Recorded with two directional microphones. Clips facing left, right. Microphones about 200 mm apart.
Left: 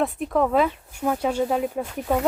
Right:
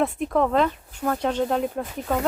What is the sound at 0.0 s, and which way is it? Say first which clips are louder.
Speech: even; centre (ahead or behind).